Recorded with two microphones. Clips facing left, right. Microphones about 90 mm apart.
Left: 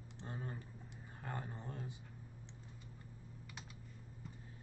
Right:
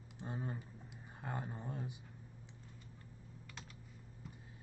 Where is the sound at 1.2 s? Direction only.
15° right (ahead or behind).